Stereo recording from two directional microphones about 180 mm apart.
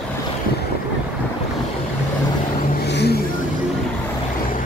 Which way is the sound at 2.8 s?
70° left (ahead or behind).